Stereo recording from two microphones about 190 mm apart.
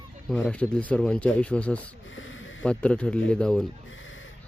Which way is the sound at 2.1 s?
90° left.